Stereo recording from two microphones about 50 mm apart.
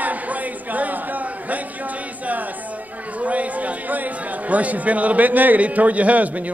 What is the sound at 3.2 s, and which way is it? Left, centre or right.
Speech, right.